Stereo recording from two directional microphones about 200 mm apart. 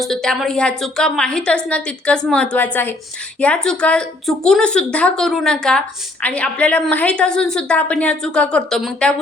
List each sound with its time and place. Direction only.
0.0 s a woman's voice: centre (ahead or behind)